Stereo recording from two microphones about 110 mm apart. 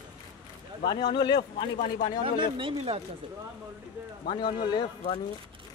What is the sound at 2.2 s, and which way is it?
Speech, 50° right (ahead or behind).